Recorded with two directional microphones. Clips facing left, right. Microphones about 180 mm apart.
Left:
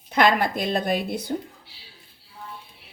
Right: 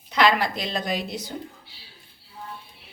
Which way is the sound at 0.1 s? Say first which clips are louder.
Left 1 dB; 50° left (ahead or behind).